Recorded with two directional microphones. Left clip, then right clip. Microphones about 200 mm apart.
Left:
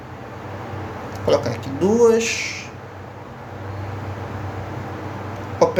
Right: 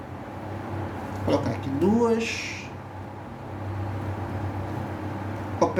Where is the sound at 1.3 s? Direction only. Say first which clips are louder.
Left 7 dB; 45° left (ahead or behind).